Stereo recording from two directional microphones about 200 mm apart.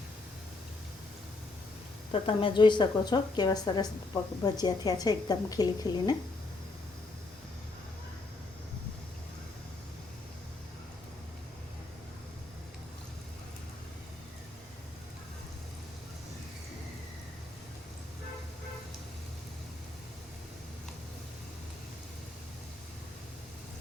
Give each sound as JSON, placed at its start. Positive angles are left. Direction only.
{"t": 2.1, "sound": "a woman's voice", "side_deg": 25}